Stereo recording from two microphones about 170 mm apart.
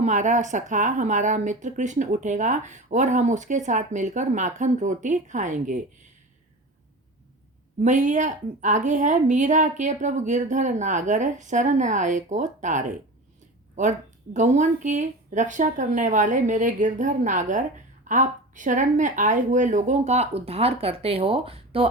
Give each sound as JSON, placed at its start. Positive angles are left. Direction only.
{"t": 0.0, "sound": "speech", "side_deg": -45}
{"t": 7.8, "sound": "speech", "side_deg": -45}
{"t": 14.3, "sound": "speech", "side_deg": -45}